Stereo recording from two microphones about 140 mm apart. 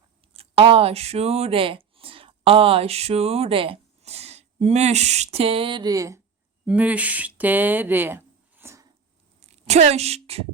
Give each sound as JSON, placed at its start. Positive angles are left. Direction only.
{"t": 0.3, "sound": "speech", "side_deg": -40}
{"t": 6.7, "sound": "speech", "side_deg": -10}
{"t": 9.4, "sound": "a woman's voice", "side_deg": -50}